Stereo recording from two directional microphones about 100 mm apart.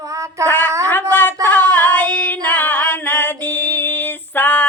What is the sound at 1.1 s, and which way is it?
Female singing, 20° left (ahead or behind).